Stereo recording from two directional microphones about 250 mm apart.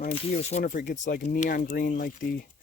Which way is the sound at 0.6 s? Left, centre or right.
Left.